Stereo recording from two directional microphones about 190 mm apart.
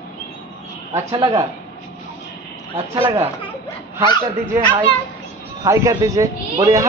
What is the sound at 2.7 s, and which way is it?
Speech, 30° right (ahead or behind).